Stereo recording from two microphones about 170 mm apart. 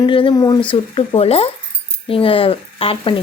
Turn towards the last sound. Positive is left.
turn(degrees=30)  # may be behind; listen again after turning